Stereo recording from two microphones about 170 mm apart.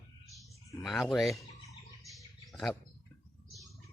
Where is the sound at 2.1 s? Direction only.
Centre (ahead or behind).